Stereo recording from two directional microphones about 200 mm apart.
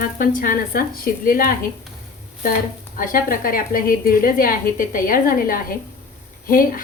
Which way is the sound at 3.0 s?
45° left (ahead or behind).